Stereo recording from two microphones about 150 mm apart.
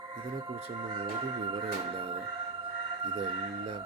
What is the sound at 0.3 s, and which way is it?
Speech, 35° right (ahead or behind).